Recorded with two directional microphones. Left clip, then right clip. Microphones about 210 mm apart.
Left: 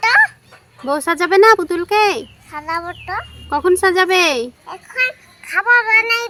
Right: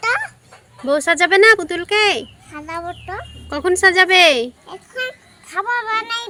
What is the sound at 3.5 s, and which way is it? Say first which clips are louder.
Speech: even; 10° left (ahead or behind).